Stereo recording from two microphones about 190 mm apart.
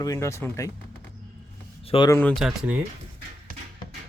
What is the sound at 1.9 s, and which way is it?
Speech, 25° left (ahead or behind).